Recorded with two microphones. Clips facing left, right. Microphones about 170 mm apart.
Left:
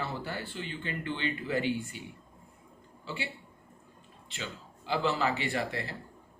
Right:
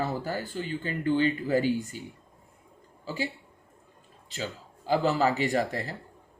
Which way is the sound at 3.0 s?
40° right (ahead or behind).